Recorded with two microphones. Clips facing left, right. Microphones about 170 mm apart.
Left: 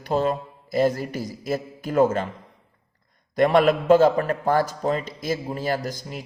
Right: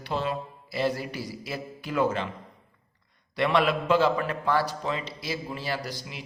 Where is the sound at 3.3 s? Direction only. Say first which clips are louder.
Left 6 dB; 45° left (ahead or behind).